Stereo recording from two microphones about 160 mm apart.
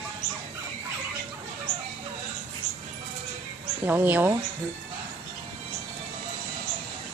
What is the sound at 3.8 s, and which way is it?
Speech, 10° right (ahead or behind).